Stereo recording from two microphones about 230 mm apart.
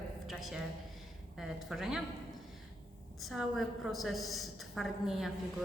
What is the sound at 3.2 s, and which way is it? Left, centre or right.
Speech, centre.